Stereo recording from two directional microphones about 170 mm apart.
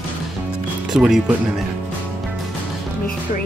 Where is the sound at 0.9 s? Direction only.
5° right (ahead or behind).